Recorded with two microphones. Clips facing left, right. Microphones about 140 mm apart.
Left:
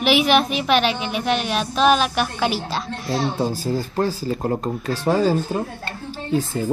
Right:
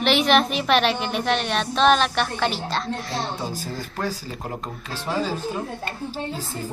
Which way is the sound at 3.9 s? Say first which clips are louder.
Left 7 dB; 35° left (ahead or behind).